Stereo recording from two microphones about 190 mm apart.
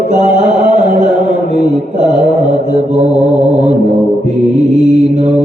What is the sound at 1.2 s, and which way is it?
Mantra, 40° right (ahead or behind).